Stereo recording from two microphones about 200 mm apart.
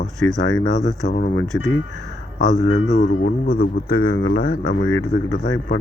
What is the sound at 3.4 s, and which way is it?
Speech, 45° left (ahead or behind).